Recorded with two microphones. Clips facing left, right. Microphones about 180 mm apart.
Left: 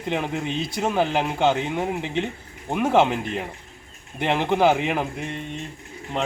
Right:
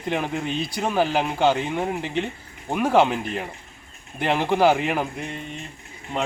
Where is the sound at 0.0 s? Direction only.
Centre (ahead or behind).